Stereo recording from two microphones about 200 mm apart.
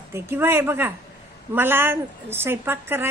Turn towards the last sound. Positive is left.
turn(degrees=-10)  # may be behind; listen again after turning